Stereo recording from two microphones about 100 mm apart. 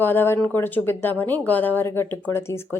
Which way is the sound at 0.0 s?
20° left (ahead or behind).